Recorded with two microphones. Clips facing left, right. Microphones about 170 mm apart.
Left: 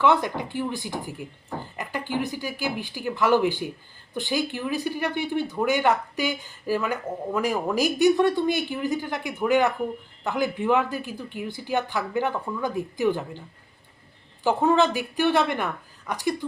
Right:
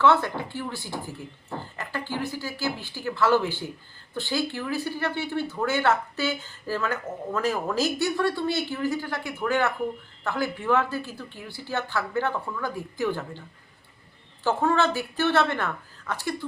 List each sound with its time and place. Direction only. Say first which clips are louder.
0.0 s speech: even; 15° left (ahead or behind)
14.4 s speech: left 3 dB; 15° left (ahead or behind)